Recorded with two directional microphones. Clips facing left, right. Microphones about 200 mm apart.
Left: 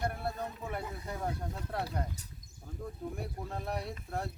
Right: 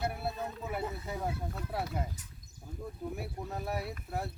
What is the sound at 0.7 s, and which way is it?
Snake, 5° right (ahead or behind).